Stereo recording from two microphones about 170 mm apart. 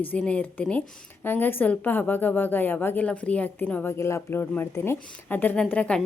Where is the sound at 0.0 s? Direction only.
10° left (ahead or behind).